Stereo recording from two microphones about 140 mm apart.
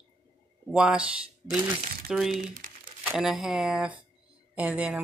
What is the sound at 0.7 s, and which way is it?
Speech, 5° right (ahead or behind).